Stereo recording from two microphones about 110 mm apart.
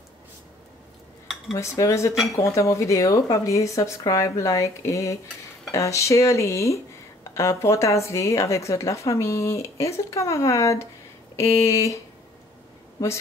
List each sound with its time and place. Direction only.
1.5 s speech: 30° left (ahead or behind)